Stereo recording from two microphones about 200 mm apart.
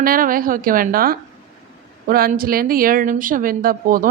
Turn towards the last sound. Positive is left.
turn(degrees=-45)  # may be behind; listen again after turning